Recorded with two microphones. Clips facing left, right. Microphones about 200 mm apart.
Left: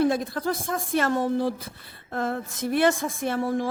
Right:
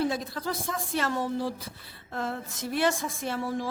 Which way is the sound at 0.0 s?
55° left (ahead or behind).